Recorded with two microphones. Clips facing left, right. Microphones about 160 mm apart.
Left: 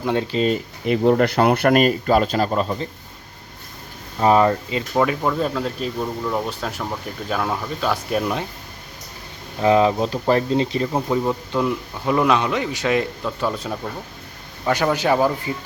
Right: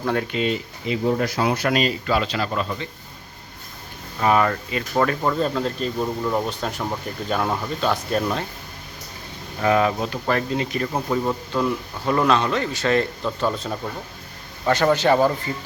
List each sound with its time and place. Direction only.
0.0 s speech: 20° left (ahead or behind)
0.3 s speech: 40° left (ahead or behind)
0.9 s speech: 60° left (ahead or behind); by 2.5 s 45° left (ahead or behind)
2.5 s speech: 35° left (ahead or behind)
4.2 s speech: 30° left (ahead or behind)
4.9 s speech: 5° left (ahead or behind)
9.6 s speech: 25° left (ahead or behind)
10.9 s a man's voice: 10° left (ahead or behind)